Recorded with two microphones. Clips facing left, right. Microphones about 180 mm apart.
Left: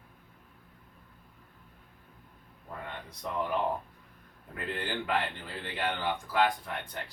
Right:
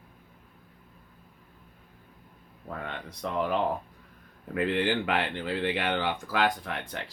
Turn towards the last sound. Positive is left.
turn(degrees=-90)